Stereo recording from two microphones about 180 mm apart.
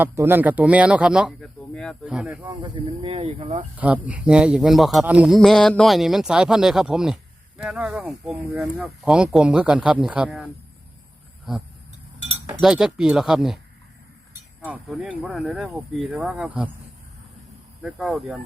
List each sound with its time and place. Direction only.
0.0 s speech: 10° right (ahead or behind)
2.4 s speech: 25° right (ahead or behind)
3.8 s speech: 10° right (ahead or behind)
12.5 s speech: 5° right (ahead or behind)
14.6 s speech: 5° right (ahead or behind)
17.8 s speech: centre (ahead or behind)